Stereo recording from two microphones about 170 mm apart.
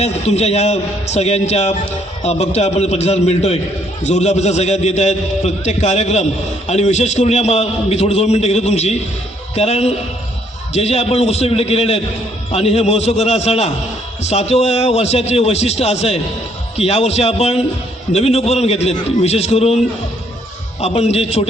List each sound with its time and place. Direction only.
0.0 s a man's voice: 40° left (ahead or behind)
20.8 s a man's voice: 40° left (ahead or behind)